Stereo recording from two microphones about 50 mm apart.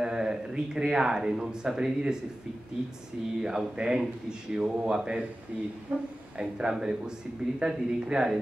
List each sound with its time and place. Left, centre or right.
0.0 s speech: centre
3.3 s a woman's voice: centre